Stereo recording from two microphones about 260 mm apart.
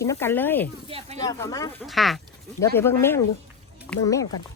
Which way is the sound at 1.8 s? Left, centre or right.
Centre.